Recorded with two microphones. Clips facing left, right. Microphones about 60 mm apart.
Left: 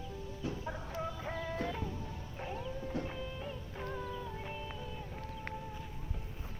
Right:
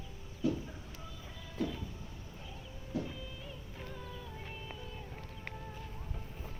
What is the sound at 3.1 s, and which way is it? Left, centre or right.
Music, left.